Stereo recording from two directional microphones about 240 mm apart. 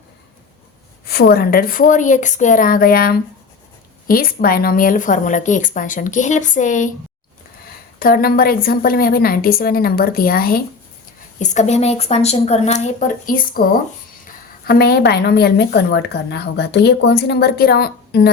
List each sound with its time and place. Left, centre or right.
1.0 s a woman's voice: left
7.9 s a woman's voice: left
14.6 s a woman's voice: left